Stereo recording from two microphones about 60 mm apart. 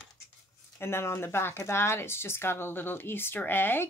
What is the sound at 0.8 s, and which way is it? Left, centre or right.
Speech, left.